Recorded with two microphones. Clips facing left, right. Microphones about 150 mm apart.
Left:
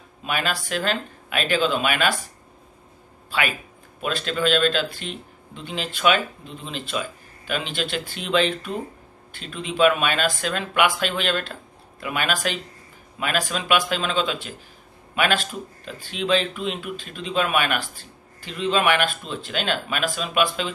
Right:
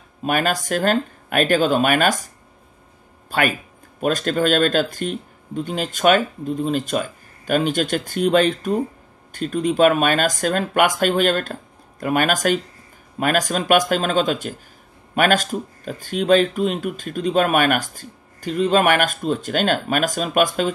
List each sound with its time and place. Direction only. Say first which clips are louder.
0.2 s speech: right 6 dB; 45° right (ahead or behind)
3.3 s speech: right 5 dB; 45° right (ahead or behind)